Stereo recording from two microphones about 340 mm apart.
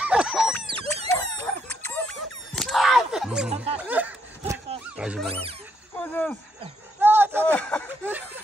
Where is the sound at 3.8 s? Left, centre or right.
Centre.